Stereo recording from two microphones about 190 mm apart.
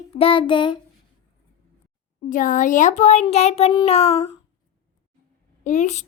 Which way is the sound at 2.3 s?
45° left (ahead or behind).